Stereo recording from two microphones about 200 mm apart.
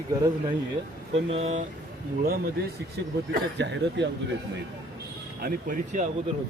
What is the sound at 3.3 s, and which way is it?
Speech, 60° right (ahead or behind).